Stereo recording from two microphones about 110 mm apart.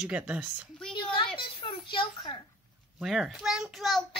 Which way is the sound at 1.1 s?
50° left (ahead or behind).